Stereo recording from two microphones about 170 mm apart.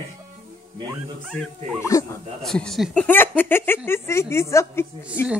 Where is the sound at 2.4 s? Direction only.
5° left (ahead or behind).